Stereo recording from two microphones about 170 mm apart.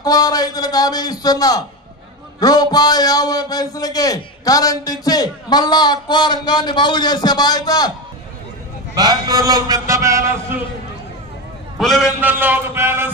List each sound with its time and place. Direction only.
0.0 s a man's voice: 20° left (ahead or behind)
8.9 s a man's voice: 20° right (ahead or behind)
11.8 s a man's voice: centre (ahead or behind)
12.2 s speech: 10° right (ahead or behind)